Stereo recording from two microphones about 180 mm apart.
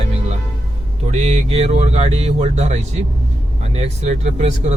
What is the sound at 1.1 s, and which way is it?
Speech, 40° right (ahead or behind).